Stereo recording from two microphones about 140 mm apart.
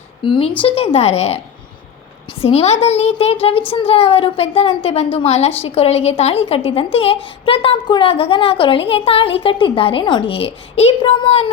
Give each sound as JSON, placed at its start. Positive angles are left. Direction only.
{"t": 0.2, "sound": "a woman's voice", "side_deg": 40}
{"t": 0.9, "sound": "a woman's voice", "side_deg": 50}
{"t": 2.4, "sound": "a woman's voice", "side_deg": 45}